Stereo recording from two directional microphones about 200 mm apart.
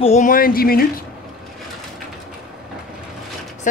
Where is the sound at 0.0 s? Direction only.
35° left (ahead or behind).